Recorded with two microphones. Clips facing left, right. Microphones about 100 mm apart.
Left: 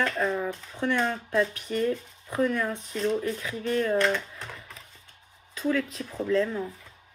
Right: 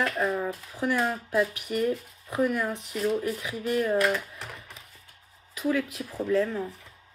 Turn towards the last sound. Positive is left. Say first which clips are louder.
# even
turn(degrees=-5)  # may be behind; listen again after turning